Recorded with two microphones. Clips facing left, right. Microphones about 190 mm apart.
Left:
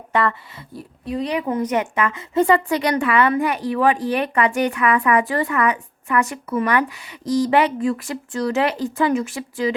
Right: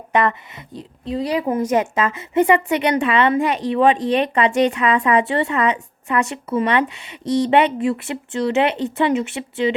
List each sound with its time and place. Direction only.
0.1 s a woman's voice: 20° right (ahead or behind)